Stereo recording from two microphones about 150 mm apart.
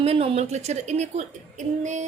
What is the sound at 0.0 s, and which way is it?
A woman's voice, 40° right (ahead or behind).